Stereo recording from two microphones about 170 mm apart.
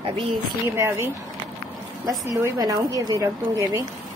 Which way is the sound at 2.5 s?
20° right (ahead or behind).